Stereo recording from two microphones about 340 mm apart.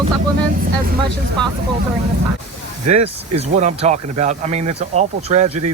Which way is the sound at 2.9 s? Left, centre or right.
Centre.